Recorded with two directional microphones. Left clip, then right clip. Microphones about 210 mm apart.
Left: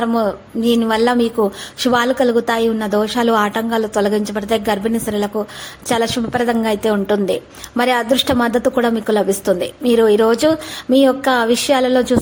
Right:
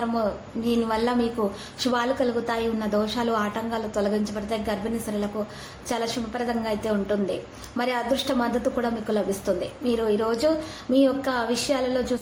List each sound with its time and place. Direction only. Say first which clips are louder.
0.0 s a woman's voice: left 8 dB; 45° left (ahead or behind)